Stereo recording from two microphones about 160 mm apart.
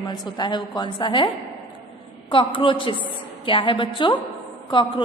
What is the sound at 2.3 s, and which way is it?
A woman's voice, 30° left (ahead or behind).